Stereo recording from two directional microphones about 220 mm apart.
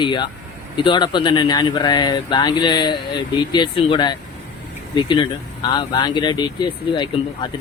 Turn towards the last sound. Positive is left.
turn(degrees=20)  # may be behind; listen again after turning